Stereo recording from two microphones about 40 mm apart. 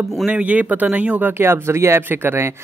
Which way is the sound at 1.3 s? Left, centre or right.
Right.